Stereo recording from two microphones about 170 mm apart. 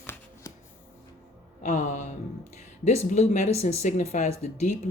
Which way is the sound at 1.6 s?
45° left (ahead or behind).